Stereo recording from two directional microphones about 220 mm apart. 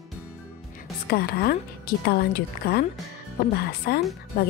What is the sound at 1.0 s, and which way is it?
A woman's voice, 45° left (ahead or behind).